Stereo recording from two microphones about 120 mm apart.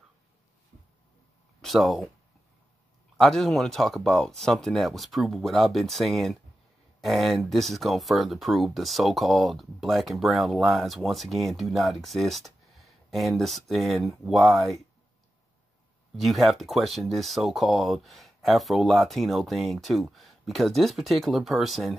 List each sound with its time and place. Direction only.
1.6 s speech: centre (ahead or behind)
3.2 s speech: 5° left (ahead or behind)
16.2 s speech: centre (ahead or behind)